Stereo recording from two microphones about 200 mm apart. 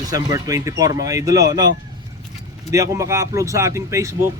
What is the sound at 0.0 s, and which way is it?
Speech, 20° right (ahead or behind).